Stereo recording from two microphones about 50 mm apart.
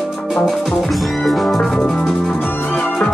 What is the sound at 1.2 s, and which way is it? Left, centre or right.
Music, centre.